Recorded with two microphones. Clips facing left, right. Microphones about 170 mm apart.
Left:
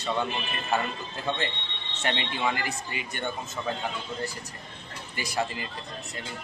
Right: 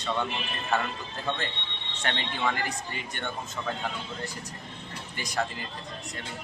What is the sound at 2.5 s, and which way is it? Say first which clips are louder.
Speech: right 1 dB; 10° left (ahead or behind).